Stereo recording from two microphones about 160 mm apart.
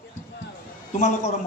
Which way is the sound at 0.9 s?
45° left (ahead or behind).